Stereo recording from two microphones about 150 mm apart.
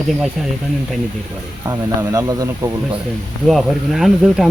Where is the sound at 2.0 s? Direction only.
25° right (ahead or behind).